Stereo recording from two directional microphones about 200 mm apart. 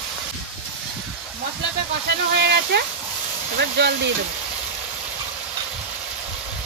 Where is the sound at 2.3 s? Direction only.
55° right (ahead or behind).